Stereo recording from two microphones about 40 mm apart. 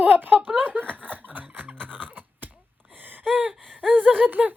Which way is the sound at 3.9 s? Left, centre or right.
Right.